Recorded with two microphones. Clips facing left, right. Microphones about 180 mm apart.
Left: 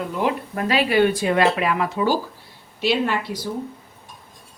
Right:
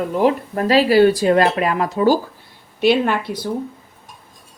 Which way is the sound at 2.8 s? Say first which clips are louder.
Right 5 dB; 55° right (ahead or behind).